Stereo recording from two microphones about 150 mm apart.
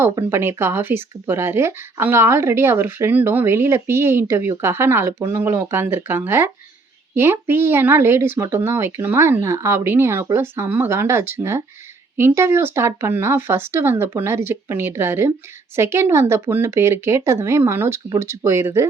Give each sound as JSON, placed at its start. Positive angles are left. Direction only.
{"t": 0.0, "sound": "speech", "side_deg": -15}